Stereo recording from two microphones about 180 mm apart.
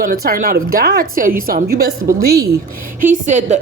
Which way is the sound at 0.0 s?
50° right (ahead or behind).